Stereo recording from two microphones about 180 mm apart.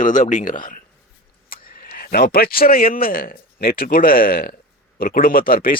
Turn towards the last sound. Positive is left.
turn(degrees=50)  # may be behind; listen again after turning